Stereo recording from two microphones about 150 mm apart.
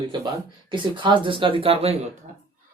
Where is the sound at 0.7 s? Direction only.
35° right (ahead or behind).